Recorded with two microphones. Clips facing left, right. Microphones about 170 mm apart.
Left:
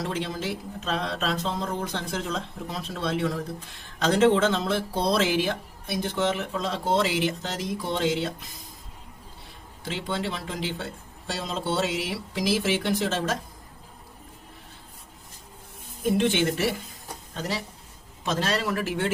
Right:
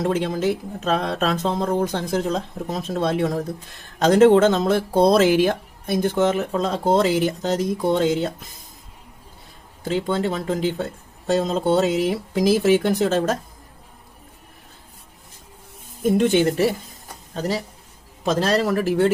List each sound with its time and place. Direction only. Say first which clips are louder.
0.0 s speech: right 9 dB; 50° right (ahead or behind)
9.8 s speech: right 8 dB; 45° right (ahead or behind)
16.0 s speech: right 6 dB; 40° right (ahead or behind)